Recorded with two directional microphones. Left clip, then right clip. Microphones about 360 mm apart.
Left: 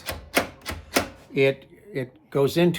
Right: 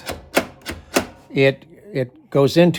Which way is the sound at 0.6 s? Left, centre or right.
Centre.